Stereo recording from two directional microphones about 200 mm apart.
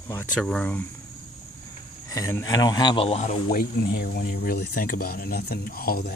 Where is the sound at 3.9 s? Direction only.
50° left (ahead or behind).